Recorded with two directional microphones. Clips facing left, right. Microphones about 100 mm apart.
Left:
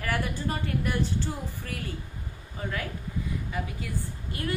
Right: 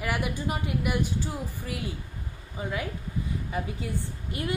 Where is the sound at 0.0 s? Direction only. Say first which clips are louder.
Right 1 dB; 15° right (ahead or behind).